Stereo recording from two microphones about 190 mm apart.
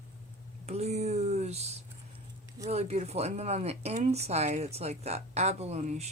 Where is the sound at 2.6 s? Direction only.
35° right (ahead or behind).